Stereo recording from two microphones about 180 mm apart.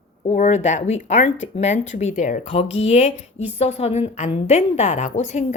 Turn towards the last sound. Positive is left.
turn(degrees=40)  # may be behind; listen again after turning